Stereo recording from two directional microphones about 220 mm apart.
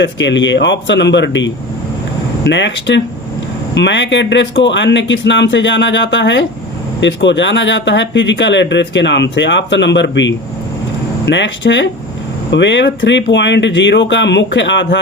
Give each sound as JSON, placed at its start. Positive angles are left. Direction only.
{"t": 0.0, "sound": "speech", "side_deg": 55}